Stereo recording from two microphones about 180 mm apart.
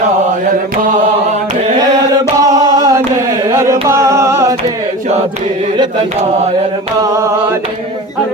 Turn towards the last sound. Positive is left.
turn(degrees=-15)  # may be behind; listen again after turning